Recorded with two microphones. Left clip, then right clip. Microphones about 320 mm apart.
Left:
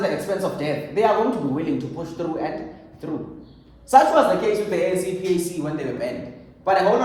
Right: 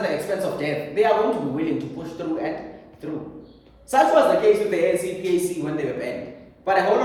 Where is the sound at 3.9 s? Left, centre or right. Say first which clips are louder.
Left 1 dB; centre.